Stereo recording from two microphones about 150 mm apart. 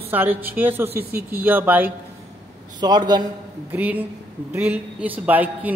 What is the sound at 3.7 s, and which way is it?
A man's voice, 10° right (ahead or behind).